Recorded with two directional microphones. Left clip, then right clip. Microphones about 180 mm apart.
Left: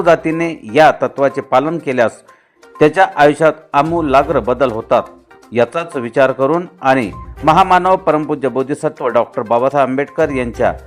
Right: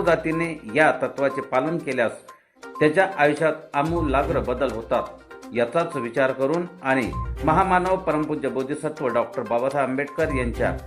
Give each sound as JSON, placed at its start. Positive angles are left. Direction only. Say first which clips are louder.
{"t": 0.0, "sound": "a man's voice", "louder": "left 9 dB", "side_deg": 25}